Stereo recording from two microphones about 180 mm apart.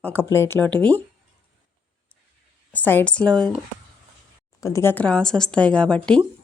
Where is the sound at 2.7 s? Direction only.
10° left (ahead or behind).